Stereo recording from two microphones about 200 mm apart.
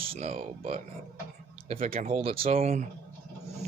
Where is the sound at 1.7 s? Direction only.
30° right (ahead or behind).